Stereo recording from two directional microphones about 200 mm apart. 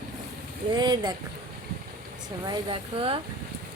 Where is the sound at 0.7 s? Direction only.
20° right (ahead or behind).